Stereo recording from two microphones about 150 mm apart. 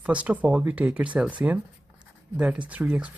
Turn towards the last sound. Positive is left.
turn(degrees=-10)  # may be behind; listen again after turning